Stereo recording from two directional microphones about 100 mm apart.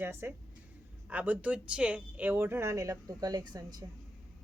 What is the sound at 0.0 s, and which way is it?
Speech, 25° right (ahead or behind).